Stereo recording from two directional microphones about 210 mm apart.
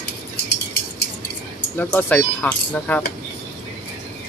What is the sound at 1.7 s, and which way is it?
Speech, 10° left (ahead or behind).